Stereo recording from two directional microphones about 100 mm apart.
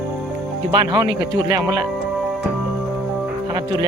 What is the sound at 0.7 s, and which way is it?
Music, 45° right (ahead or behind).